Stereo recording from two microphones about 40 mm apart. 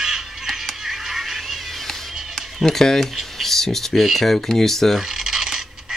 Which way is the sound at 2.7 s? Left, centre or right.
Centre.